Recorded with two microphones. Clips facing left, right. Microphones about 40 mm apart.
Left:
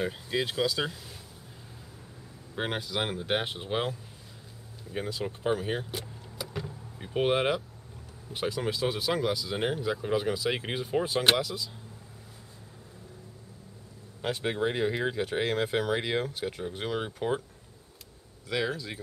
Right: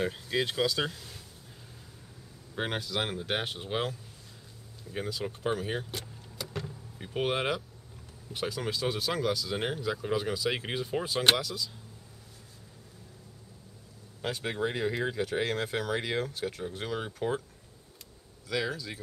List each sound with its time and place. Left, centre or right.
0.0 s speech: centre
2.5 s speech: centre
4.9 s speech: centre
11.4 s speech: centre
14.2 s speech: centre
18.5 s speech: centre